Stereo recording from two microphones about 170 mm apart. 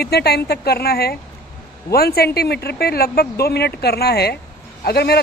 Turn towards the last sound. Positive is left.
turn(degrees=70)  # may be behind; listen again after turning